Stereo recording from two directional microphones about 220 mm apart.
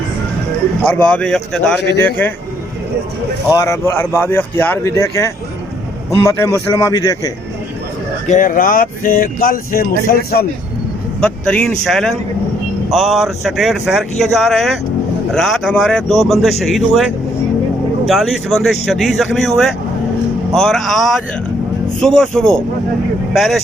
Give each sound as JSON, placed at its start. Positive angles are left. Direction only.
{"t": 0.9, "sound": "speech", "side_deg": 5}
{"t": 3.5, "sound": "speech", "side_deg": 15}
{"t": 8.3, "sound": "speech", "side_deg": 40}
{"t": 11.2, "sound": "speech", "side_deg": 5}
{"t": 22.0, "sound": "speech", "side_deg": 0}